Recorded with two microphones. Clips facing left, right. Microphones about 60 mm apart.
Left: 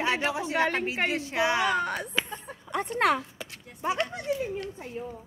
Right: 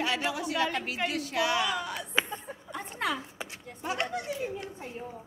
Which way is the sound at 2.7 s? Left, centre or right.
Left.